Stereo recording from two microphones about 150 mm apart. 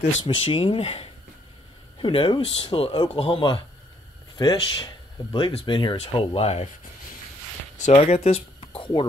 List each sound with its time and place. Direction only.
0.2 s speech: 35° left (ahead or behind)
7.8 s speech: 45° left (ahead or behind)